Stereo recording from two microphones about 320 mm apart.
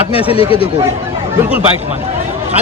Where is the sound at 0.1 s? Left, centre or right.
Centre.